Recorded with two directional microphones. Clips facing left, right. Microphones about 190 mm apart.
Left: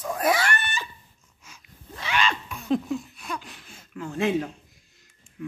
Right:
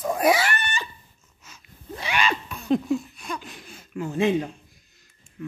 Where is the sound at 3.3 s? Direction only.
15° right (ahead or behind).